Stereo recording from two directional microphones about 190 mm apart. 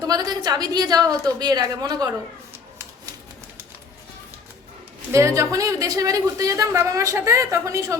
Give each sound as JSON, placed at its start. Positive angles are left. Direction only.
{"t": 0.0, "sound": "a woman's voice", "side_deg": -20}
{"t": 5.1, "sound": "a woman's voice", "side_deg": -15}